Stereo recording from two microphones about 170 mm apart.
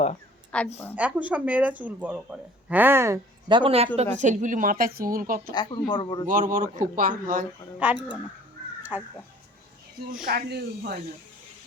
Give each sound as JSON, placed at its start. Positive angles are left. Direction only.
{"t": 0.5, "sound": "a woman's voice", "side_deg": 5}
{"t": 0.9, "sound": "speech", "side_deg": -10}
{"t": 3.5, "sound": "a man's voice", "side_deg": -30}
{"t": 5.5, "sound": "speech", "side_deg": 20}
{"t": 6.2, "sound": "a man's voice", "side_deg": -55}
{"t": 7.8, "sound": "speech", "side_deg": -10}
{"t": 8.8, "sound": "a sound", "side_deg": -10}
{"t": 10.2, "sound": "speech", "side_deg": -65}